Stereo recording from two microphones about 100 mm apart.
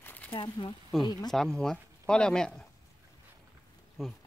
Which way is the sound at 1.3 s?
5° left (ahead or behind).